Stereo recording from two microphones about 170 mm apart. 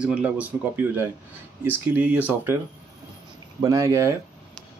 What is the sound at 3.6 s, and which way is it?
Speech, 15° right (ahead or behind).